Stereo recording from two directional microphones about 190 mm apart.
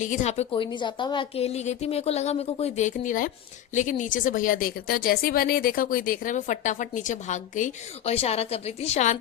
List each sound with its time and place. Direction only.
0.0 s a woman's voice: 40° left (ahead or behind)